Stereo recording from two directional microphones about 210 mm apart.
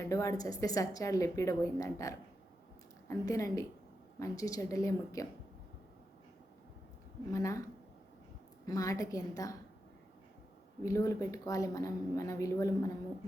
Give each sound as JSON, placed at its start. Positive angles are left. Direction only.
{"t": 0.0, "sound": "a woman's voice", "side_deg": 15}
{"t": 7.3, "sound": "a woman's voice", "side_deg": 15}
{"t": 8.6, "sound": "a woman's voice", "side_deg": 15}
{"t": 10.8, "sound": "a woman's voice", "side_deg": 15}